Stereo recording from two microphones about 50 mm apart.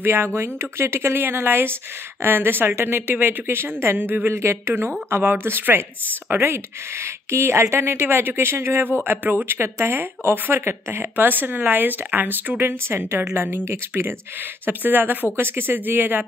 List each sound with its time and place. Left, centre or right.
0.0 s speech: right
1.2 s speech: right
4.3 s speech: right
7.0 s speech: right
9.0 s speech: right